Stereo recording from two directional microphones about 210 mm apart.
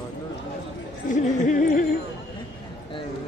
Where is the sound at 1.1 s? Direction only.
35° left (ahead or behind).